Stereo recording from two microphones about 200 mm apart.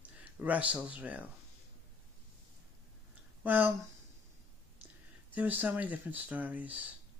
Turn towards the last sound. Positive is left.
turn(degrees=-10)  # may be behind; listen again after turning